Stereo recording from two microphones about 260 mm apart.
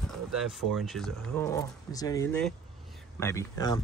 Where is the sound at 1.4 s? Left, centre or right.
Centre.